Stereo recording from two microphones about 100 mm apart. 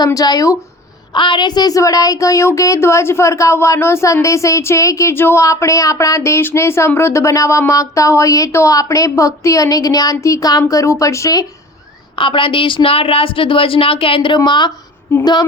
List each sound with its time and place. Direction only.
0.0 s speech: 40° left (ahead or behind)
1.1 s speech: 50° left (ahead or behind); by 11.4 s 35° left (ahead or behind)
12.1 s a woman's voice: 60° left (ahead or behind)
15.2 s female singing: 45° left (ahead or behind)